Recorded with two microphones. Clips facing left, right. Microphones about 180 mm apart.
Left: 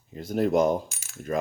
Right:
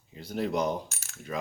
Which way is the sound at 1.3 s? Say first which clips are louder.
Left 7 dB; 45° left (ahead or behind).